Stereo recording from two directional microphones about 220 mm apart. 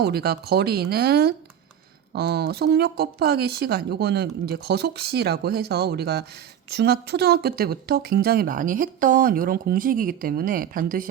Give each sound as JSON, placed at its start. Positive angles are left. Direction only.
{"t": 0.0, "sound": "speech", "side_deg": -45}